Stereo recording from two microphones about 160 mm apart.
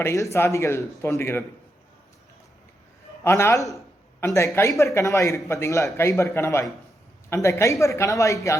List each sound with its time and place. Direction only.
0.0 s speech: 20° left (ahead or behind)
3.2 s speech: 15° left (ahead or behind)